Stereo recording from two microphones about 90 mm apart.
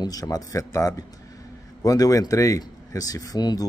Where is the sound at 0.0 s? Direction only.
45° left (ahead or behind).